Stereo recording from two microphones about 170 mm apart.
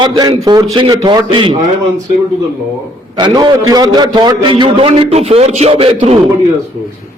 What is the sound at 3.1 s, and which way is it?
A man's voice, 25° right (ahead or behind).